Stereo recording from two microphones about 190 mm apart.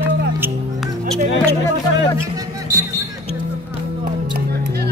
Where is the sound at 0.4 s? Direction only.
10° right (ahead or behind).